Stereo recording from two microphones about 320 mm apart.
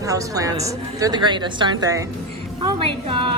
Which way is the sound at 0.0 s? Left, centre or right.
Centre.